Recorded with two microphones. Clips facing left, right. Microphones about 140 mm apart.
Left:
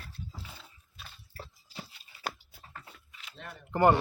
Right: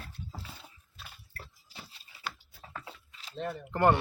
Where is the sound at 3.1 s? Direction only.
35° right (ahead or behind).